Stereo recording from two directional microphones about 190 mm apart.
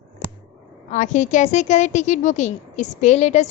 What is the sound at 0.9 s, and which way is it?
A woman's voice, 40° left (ahead or behind).